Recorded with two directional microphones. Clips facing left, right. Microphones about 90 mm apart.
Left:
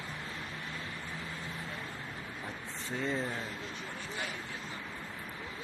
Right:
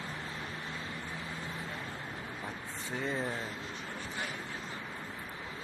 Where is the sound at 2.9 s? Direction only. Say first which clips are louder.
Left 1 dB; 20° right (ahead or behind).